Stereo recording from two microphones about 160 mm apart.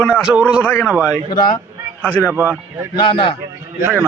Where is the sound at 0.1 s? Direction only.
5° right (ahead or behind).